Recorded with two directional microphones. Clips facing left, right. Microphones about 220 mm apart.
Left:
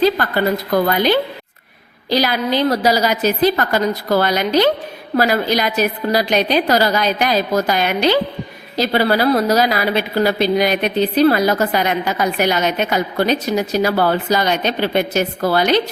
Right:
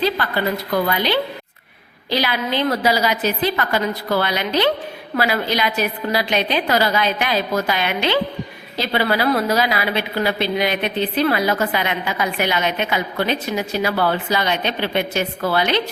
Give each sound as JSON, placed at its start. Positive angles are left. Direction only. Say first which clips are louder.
{"t": 0.0, "sound": "a woman's voice", "louder": "left 5 dB", "side_deg": 45}